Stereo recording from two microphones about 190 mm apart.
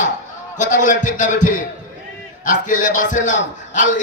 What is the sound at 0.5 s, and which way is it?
A man's voice, 40° left (ahead or behind).